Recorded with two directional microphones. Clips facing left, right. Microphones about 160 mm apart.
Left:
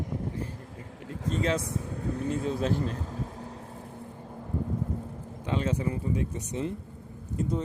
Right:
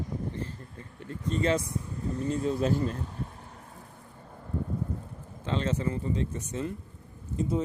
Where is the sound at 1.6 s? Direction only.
90° left; by 2.2 s 70° left (ahead or behind).